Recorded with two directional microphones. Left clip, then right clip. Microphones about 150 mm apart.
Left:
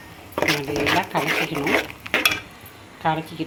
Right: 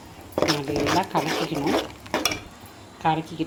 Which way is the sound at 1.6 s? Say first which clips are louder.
Left 3 dB; 20° left (ahead or behind).